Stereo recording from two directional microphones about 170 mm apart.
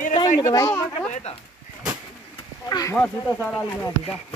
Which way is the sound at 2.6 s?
20° left (ahead or behind).